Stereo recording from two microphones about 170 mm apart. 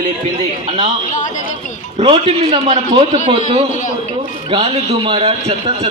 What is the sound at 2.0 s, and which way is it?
A man's voice, 35° right (ahead or behind).